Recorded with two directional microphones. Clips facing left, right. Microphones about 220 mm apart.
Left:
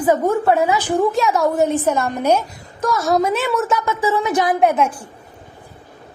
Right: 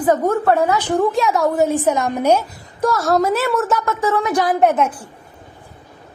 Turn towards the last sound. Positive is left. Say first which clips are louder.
# right 1 dB
turn(degrees=10)  # may be behind; listen again after turning